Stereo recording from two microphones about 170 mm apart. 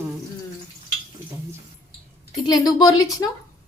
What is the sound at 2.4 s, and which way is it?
Speech, 25° left (ahead or behind).